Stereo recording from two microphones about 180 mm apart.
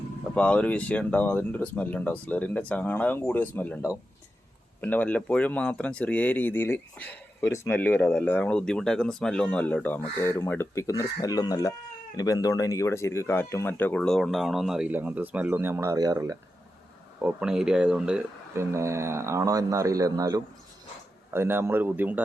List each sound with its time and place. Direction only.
0.3 s speech: 5° left (ahead or behind); by 16.4 s 15° right (ahead or behind)
17.2 s speech: 5° right (ahead or behind)
18.7 s speech: 15° right (ahead or behind)